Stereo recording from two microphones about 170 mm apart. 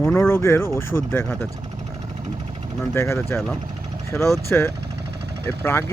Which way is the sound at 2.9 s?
15° left (ahead or behind).